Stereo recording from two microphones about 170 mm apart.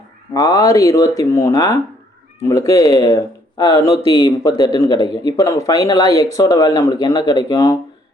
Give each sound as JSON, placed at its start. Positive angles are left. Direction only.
{"t": 0.3, "sound": "speech", "side_deg": 20}